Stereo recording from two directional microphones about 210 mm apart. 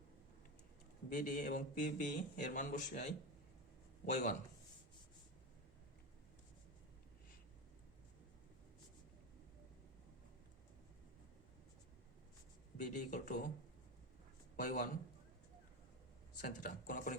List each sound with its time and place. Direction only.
1.1 s speech: 40° left (ahead or behind)
12.7 s speech: 35° left (ahead or behind)
14.5 s a man's voice: 40° left (ahead or behind)
16.4 s speech: 40° left (ahead or behind)